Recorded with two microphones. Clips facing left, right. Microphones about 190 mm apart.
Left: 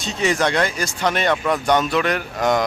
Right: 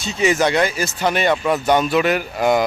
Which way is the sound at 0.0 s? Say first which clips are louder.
Right 3 dB; 5° right (ahead or behind).